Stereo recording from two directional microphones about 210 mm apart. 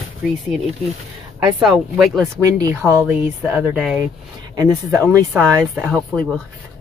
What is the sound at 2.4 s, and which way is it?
Speech, 15° right (ahead or behind).